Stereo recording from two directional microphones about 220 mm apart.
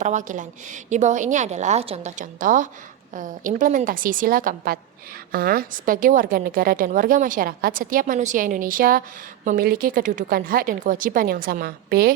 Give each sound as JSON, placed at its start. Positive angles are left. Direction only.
{"t": 0.0, "sound": "a woman's voice", "side_deg": -35}